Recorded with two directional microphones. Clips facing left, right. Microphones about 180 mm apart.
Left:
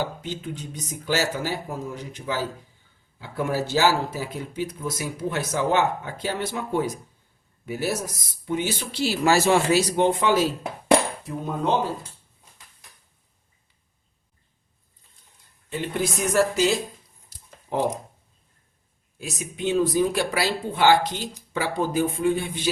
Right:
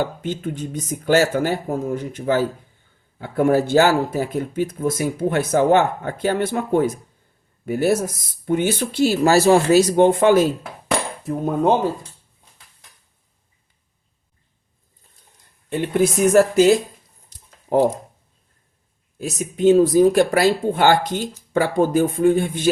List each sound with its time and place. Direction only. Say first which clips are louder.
0.0 s speech: right 6 dB; 55° right (ahead or behind)
15.7 s speech: right 8 dB; 55° right (ahead or behind)
17.3 s a sound: right 1 dB; 5° left (ahead or behind)
19.2 s speech: right 11 dB; 45° right (ahead or behind)